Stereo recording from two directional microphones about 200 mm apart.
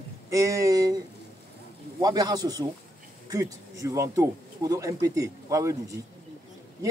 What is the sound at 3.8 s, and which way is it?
A man's voice, 15° right (ahead or behind).